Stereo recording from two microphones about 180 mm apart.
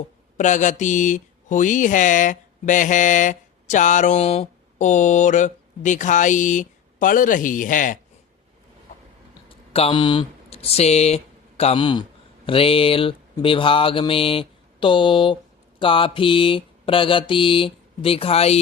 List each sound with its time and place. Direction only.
0.3 s mantra: 45° left (ahead or behind)
9.5 s speech: 30° left (ahead or behind)